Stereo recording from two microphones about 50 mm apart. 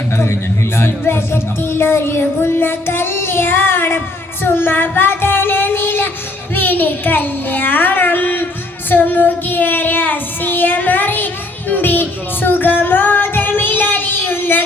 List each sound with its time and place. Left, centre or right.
0.8 s music: left
4.4 s child singing: left
6.6 s a child's voice: left
8.9 s child singing: left
11.7 s music: left